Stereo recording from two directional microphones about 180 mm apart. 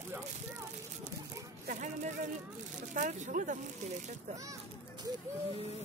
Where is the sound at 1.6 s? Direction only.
45° right (ahead or behind).